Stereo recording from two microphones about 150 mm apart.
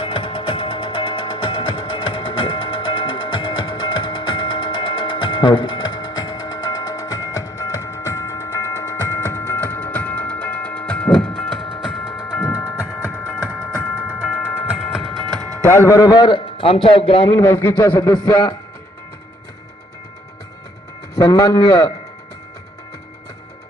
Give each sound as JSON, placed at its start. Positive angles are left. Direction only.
{"t": 0.0, "sound": "music", "side_deg": 35}
{"t": 12.0, "sound": "music", "side_deg": 25}
{"t": 12.6, "sound": "music", "side_deg": 5}
{"t": 15.6, "sound": "a man's voice", "side_deg": 15}
{"t": 17.3, "sound": "a man's voice", "side_deg": 15}
{"t": 21.2, "sound": "a man's voice", "side_deg": 25}